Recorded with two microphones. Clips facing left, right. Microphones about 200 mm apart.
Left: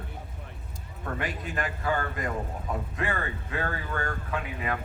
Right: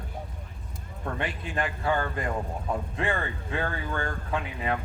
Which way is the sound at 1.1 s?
30° right (ahead or behind).